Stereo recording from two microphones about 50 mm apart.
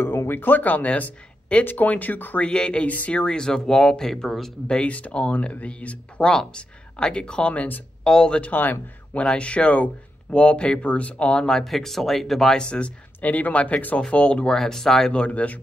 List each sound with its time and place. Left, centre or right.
0.3 s speech: left
2.4 s speech: centre
2.9 s speech: left
3.2 s speech: centre
4.7 s speech: left
8.5 s speech: left
9.1 s speech: left
11.4 s speech: centre
12.5 s speech: centre
14.0 s speech: centre
15.1 s speech: left